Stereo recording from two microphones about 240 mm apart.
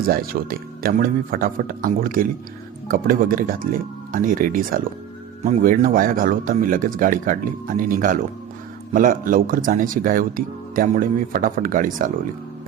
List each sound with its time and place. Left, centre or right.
0.0 s speech: right